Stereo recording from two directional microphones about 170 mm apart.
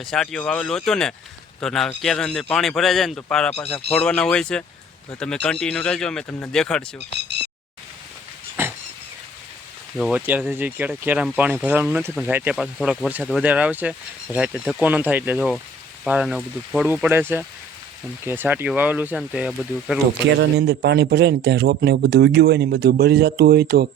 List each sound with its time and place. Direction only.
0.0 s speech: centre (ahead or behind)
7.3 s a sound: 80° right
8.6 s dog: 15° right (ahead or behind)
10.0 s speech: 5° right (ahead or behind)
20.4 s a man's voice: 80° right